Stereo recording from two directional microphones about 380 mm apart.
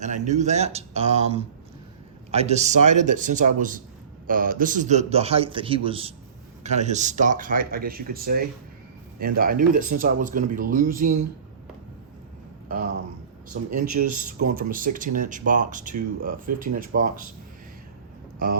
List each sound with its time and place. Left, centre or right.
0.0 s a man's voice: centre
13.7 s speech: right
14.1 s speech: right
18.4 s speech: right